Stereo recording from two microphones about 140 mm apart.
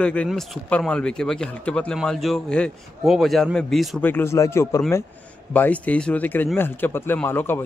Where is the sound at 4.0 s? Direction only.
15° left (ahead or behind).